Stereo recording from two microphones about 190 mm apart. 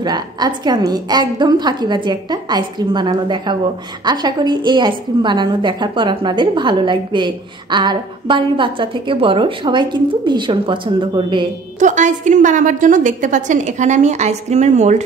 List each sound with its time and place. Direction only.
0.0 s a woman's voice: 20° right (ahead or behind)
11.8 s a woman's voice: 40° right (ahead or behind)